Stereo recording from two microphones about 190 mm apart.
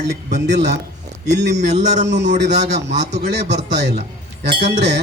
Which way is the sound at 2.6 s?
35° right (ahead or behind).